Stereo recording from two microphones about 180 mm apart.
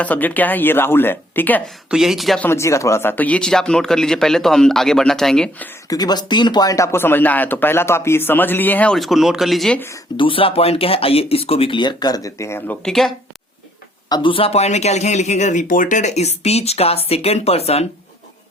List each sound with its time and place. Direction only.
0.0 s speech: 10° left (ahead or behind)
1.9 s speech: centre (ahead or behind)
2.5 s speech: 15° left (ahead or behind)
5.9 s speech: 20° left (ahead or behind)
10.2 s speech: 30° left (ahead or behind); by 13.1 s centre (ahead or behind)
14.1 s speech: 30° left (ahead or behind)